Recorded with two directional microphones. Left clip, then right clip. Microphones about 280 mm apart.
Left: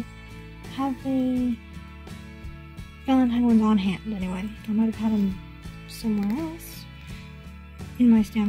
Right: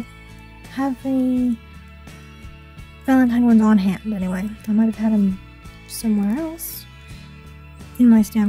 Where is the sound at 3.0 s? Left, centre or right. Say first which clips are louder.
Right 5 dB; centre.